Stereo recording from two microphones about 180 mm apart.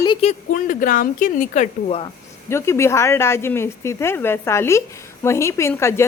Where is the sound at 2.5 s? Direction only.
15° left (ahead or behind).